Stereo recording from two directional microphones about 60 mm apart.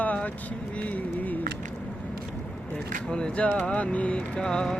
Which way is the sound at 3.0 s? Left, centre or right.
Centre.